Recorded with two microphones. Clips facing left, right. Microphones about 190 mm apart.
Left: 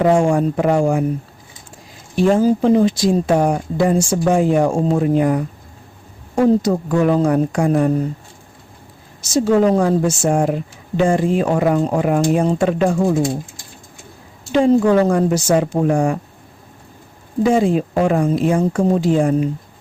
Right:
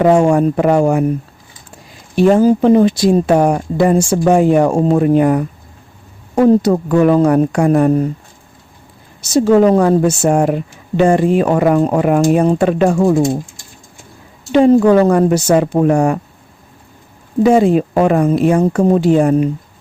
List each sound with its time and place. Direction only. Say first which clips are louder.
0.0 s a woman's voice: right 4 dB; 65° right (ahead or behind)
2.1 s a woman's voice: right 4 dB; 65° right (ahead or behind)
9.3 s a woman's voice: right 4 dB; 65° right (ahead or behind)
14.5 s a woman's voice: right 4 dB; 65° right (ahead or behind)
17.4 s a woman's voice: right 5 dB; 65° right (ahead or behind)